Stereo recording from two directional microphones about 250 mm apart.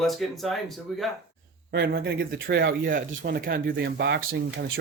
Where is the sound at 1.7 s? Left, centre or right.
Right.